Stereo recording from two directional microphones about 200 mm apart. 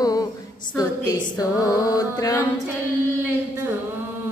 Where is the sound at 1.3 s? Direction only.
20° left (ahead or behind).